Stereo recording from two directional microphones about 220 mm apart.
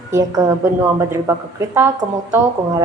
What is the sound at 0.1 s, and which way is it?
A woman's voice, 15° right (ahead or behind).